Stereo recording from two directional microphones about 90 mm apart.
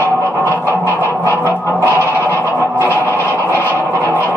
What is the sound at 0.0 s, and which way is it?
Music, 25° left (ahead or behind).